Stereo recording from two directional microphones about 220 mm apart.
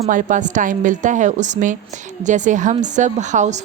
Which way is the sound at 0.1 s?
35° right (ahead or behind).